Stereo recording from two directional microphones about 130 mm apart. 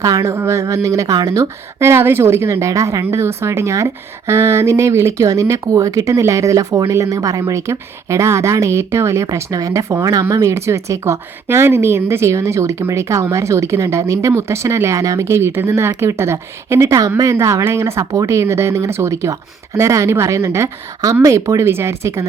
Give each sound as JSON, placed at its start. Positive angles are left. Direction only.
{"t": 0.0, "sound": "speech", "side_deg": -25}